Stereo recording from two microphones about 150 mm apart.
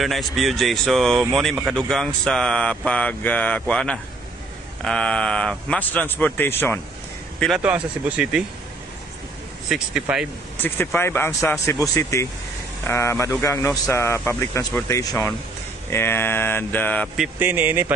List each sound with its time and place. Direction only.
0.0 s speech: centre (ahead or behind)
7.3 s speech: centre (ahead or behind)
9.7 s speech: 5° right (ahead or behind)
10.6 s speech: 15° left (ahead or behind)
11.8 s speech: 20° left (ahead or behind)
17.2 s speech: 15° right (ahead or behind)